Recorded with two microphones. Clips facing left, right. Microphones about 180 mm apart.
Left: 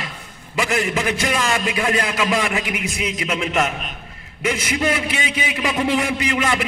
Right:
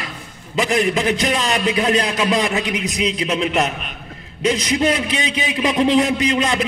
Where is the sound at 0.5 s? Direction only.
20° right (ahead or behind).